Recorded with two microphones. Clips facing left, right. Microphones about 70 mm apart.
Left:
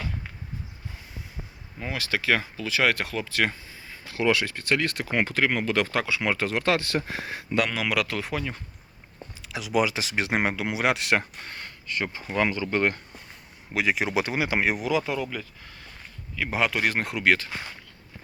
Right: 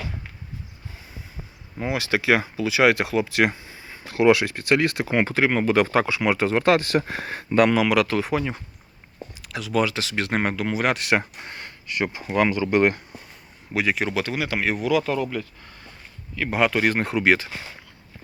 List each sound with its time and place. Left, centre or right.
1.8 s speech: right
6.9 s speech: right
7.9 s speech: centre
8.4 s speech: centre
9.4 s speech: centre
11.2 s speech: right
13.7 s speech: centre
14.1 s speech: centre
17.2 s speech: centre